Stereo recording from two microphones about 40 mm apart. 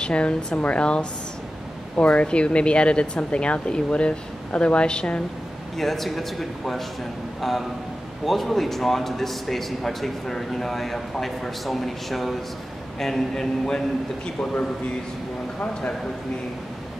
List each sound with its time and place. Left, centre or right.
0.0 s speech: left
5.8 s speech: centre
8.3 s a man's voice: centre; by 14.5 s left